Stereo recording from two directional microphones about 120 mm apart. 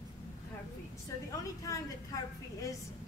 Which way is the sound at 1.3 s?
30° left (ahead or behind).